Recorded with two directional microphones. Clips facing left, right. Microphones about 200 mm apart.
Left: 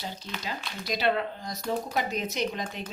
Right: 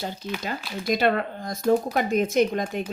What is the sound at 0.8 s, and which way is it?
Speech, 50° right (ahead or behind).